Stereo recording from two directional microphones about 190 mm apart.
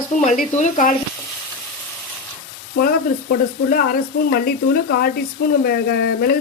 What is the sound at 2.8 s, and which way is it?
Speech, 50° left (ahead or behind).